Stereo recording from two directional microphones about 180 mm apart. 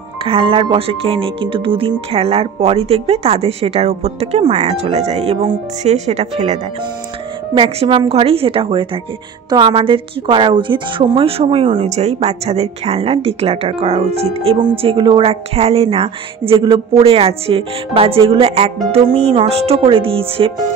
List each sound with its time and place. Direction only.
0.2 s a woman's voice: 30° right (ahead or behind)